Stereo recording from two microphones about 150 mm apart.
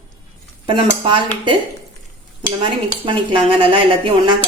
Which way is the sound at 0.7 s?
35° right (ahead or behind).